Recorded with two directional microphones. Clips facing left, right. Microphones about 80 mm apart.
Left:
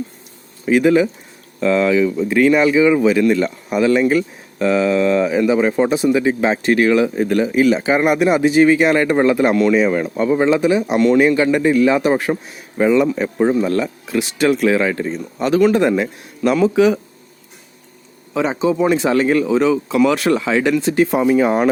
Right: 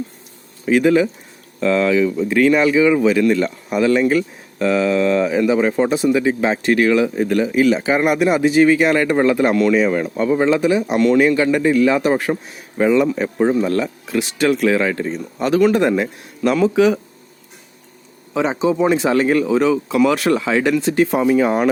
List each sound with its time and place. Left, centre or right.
0.6 s speech: centre; by 7.6 s left
7.6 s speech: centre
12.5 s speech: centre
18.3 s speech: centre